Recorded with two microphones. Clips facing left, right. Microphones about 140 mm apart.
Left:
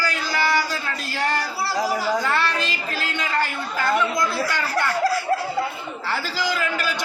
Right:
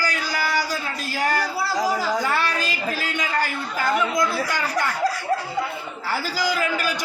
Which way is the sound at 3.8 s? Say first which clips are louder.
Even; 10° right (ahead or behind).